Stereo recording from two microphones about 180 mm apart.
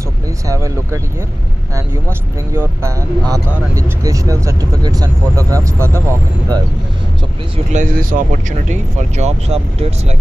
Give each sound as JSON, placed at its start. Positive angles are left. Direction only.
{"t": 0.5, "sound": "speech", "side_deg": -15}
{"t": 2.0, "sound": "speech", "side_deg": -15}
{"t": 7.7, "sound": "speech", "side_deg": -50}
{"t": 8.6, "sound": "speech", "side_deg": -40}